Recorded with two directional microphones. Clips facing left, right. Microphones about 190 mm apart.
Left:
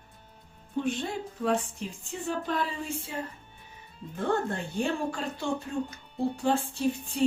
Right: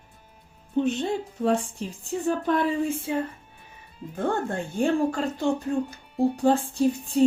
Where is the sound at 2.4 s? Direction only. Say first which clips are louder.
Right 8 dB; 55° right (ahead or behind).